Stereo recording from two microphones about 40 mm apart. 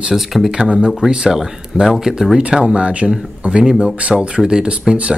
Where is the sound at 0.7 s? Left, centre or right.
Right.